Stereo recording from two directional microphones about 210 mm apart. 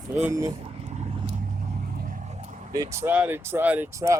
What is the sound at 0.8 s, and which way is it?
Vehicle, 30° right (ahead or behind).